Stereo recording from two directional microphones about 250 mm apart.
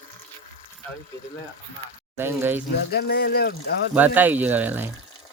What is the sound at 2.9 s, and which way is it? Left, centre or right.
Speech, left.